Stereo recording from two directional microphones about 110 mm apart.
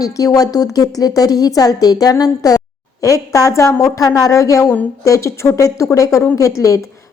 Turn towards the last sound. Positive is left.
turn(degrees=30)  # may be behind; listen again after turning